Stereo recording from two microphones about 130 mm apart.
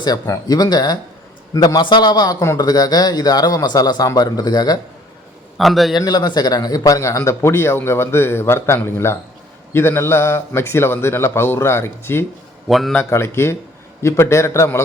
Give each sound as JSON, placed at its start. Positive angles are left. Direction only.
{"t": 0.0, "sound": "a man's voice", "side_deg": 30}
{"t": 5.5, "sound": "a man's voice", "side_deg": 0}
{"t": 5.9, "sound": "a man's voice", "side_deg": 30}
{"t": 12.6, "sound": "a man's voice", "side_deg": 0}
{"t": 13.0, "sound": "a man's voice", "side_deg": 20}